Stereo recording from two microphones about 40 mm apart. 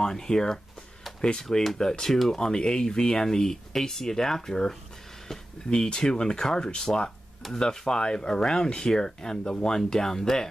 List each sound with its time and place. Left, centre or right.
0.0 s speech: centre
1.6 s speech: centre